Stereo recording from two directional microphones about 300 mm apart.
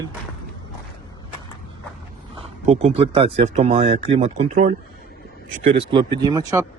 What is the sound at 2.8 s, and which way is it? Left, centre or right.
Speech, centre.